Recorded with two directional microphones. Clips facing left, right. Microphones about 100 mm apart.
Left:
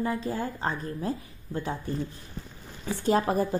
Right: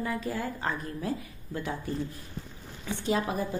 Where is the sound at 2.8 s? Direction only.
40° left (ahead or behind).